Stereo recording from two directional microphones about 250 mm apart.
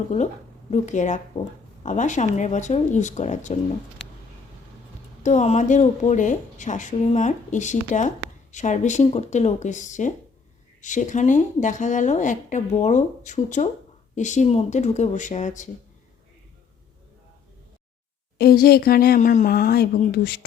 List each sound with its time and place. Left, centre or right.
0.1 s speech: left
5.2 s speech: left
18.3 s speech: left